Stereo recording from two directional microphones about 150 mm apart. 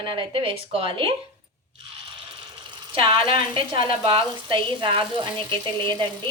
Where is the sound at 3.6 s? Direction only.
35° right (ahead or behind).